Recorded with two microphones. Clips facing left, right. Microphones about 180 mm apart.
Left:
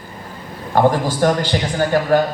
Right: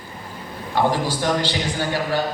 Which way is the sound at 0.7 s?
45° left (ahead or behind).